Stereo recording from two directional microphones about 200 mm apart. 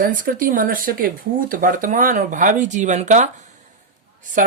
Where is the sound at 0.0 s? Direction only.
45° right (ahead or behind).